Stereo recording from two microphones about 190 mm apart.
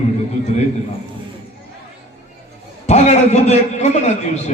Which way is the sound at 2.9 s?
35° left (ahead or behind).